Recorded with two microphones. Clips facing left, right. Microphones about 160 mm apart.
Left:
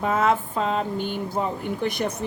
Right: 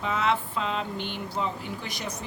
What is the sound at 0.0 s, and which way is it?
Speech, 50° left (ahead or behind).